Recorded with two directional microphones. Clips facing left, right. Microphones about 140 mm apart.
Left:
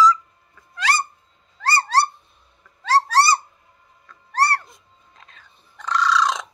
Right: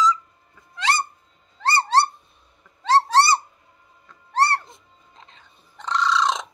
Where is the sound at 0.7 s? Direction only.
25° right (ahead or behind).